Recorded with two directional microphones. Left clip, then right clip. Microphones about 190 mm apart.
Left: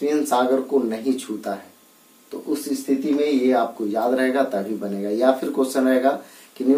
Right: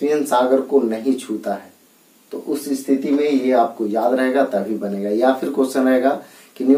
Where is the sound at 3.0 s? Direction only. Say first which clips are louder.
Even; 15° left (ahead or behind).